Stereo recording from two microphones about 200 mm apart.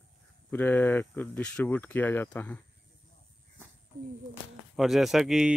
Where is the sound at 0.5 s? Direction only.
10° left (ahead or behind).